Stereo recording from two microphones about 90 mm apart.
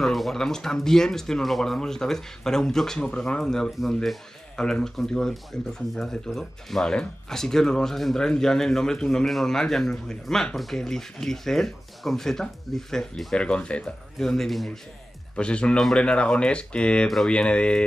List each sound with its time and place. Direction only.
0.0 s speech: 5° left (ahead or behind)